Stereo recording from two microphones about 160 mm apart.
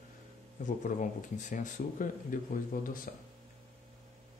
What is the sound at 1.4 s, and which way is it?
Speech, 50° left (ahead or behind).